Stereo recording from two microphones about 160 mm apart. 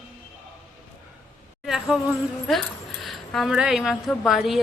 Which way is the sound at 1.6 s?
5° right (ahead or behind).